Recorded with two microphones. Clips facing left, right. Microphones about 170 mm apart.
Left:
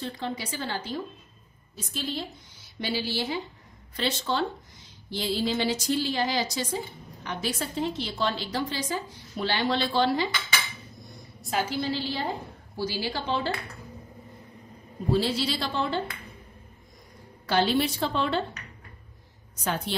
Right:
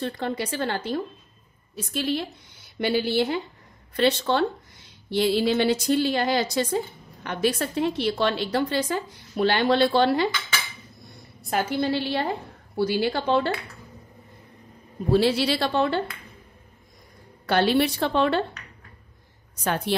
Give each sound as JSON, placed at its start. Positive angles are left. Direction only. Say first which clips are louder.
{"t": 0.0, "sound": "a woman's voice", "louder": "right 5 dB", "side_deg": -60}
{"t": 11.5, "sound": "a woman's voice", "louder": "right 4 dB", "side_deg": -60}
{"t": 15.1, "sound": "a woman's voice", "louder": "right 7 dB", "side_deg": -65}
{"t": 17.5, "sound": "a woman's voice", "louder": "right 3 dB", "side_deg": -60}